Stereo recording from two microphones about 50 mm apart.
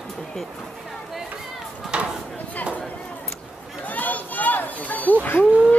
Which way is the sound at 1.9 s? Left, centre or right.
Centre.